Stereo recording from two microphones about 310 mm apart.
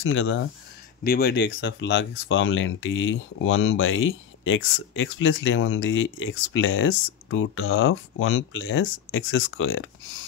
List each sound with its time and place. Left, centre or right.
0.0 s speech: left